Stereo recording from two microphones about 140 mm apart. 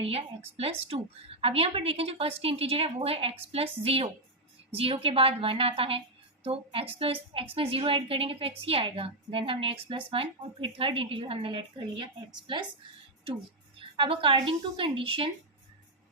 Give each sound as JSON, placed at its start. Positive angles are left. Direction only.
{"t": 0.0, "sound": "a woman's voice", "side_deg": -45}
{"t": 13.7, "sound": "a woman's voice", "side_deg": -35}